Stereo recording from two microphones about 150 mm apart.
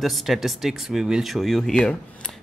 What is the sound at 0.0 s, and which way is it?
Speech, centre (ahead or behind).